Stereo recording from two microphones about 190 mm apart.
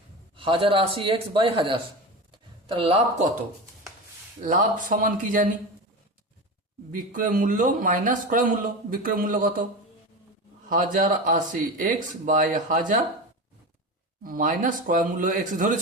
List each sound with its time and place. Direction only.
0.3 s speech: 25° right (ahead or behind)
4.4 s a man's voice: 45° right (ahead or behind)
6.9 s a man's voice: 45° right (ahead or behind)
10.7 s a man's voice: 45° right (ahead or behind)
14.3 s a man's voice: 45° right (ahead or behind)